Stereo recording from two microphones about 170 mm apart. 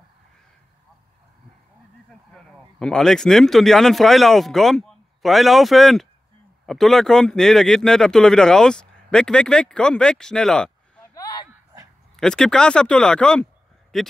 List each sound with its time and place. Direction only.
2.3 s speech: 5° left (ahead or behind)
12.2 s speech: 5° left (ahead or behind)